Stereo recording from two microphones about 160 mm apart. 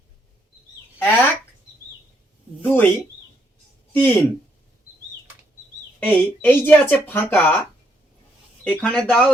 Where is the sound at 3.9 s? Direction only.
10° left (ahead or behind).